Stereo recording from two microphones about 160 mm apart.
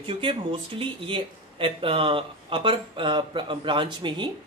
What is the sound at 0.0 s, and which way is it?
Speech, 35° right (ahead or behind).